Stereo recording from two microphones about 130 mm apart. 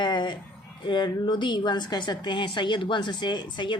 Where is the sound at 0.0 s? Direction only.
35° left (ahead or behind).